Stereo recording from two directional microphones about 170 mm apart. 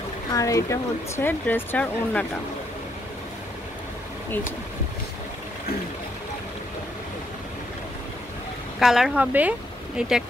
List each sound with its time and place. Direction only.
0.3 s speech: 20° left (ahead or behind)
8.7 s speech: centre (ahead or behind)